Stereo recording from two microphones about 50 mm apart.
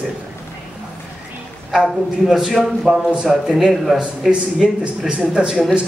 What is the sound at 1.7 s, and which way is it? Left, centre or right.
A man's voice, centre.